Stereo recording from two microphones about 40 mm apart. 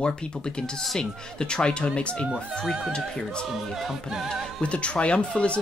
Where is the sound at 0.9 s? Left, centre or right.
Left.